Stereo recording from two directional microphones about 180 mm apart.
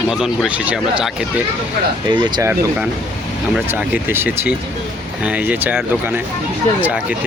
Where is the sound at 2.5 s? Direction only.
10° right (ahead or behind).